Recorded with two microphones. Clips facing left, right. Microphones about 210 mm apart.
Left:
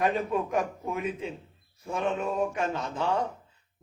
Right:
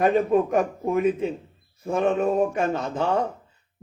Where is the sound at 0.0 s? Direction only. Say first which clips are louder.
Right 8 dB; 45° right (ahead or behind).